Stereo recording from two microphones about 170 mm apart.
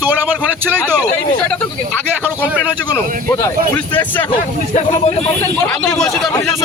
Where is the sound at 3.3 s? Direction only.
15° left (ahead or behind).